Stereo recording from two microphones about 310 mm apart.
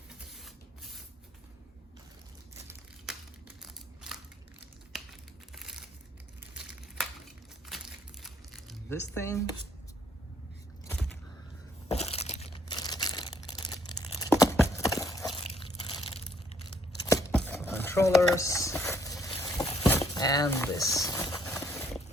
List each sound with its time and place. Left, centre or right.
3.6 s crushing: centre
5.5 s crumpling: centre
7.7 s a sound: centre
8.2 s crumpling: centre
11.9 s crumpling: centre
14.7 s clip-clop: centre
15.3 s crunch: centre
16.6 s tearing: centre
17.5 s a sound: centre